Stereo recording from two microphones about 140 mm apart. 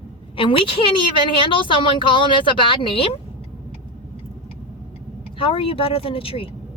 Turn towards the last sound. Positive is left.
turn(degrees=40)  # may be behind; listen again after turning